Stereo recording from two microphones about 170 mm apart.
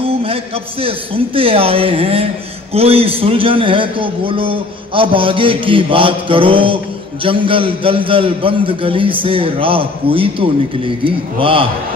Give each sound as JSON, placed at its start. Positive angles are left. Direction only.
{"t": 0.0, "sound": "a man's voice", "side_deg": -35}